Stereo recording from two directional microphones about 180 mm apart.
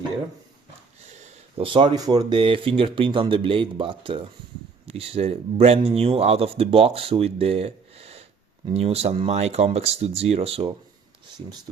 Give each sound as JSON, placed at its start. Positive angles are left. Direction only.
{"t": 1.1, "sound": "speech", "side_deg": -35}